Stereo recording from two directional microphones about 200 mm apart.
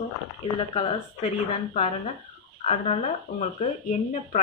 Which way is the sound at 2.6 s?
30° left (ahead or behind).